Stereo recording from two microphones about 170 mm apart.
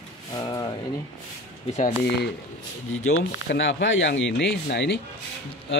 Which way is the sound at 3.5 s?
90° left.